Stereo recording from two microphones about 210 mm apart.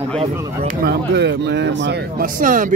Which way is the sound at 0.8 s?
55° right (ahead or behind).